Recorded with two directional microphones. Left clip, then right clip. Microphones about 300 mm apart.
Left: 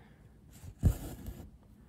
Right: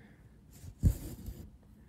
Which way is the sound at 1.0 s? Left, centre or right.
Centre.